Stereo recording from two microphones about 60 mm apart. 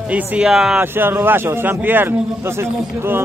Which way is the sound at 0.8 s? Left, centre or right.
Right.